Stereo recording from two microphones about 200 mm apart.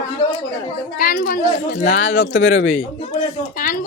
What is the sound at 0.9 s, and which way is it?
A woman's voice, 45° left (ahead or behind).